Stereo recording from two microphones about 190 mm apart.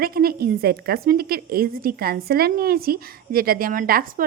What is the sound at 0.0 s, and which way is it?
A woman's voice, 50° right (ahead or behind).